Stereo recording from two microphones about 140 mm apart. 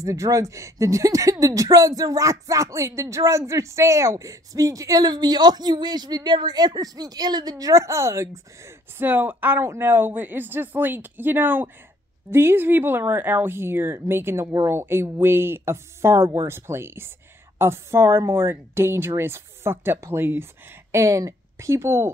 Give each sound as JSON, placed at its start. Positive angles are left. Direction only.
{"t": 0.0, "sound": "speech", "side_deg": -20}